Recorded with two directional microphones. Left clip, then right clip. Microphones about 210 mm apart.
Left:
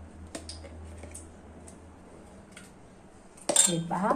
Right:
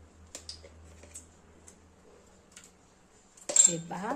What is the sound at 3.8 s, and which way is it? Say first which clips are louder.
Speech: left 8 dB; 35° right (ahead or behind).